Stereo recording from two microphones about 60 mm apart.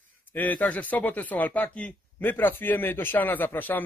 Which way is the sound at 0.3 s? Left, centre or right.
Left.